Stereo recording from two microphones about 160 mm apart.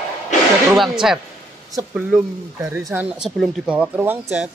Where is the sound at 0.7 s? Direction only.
Centre (ahead or behind).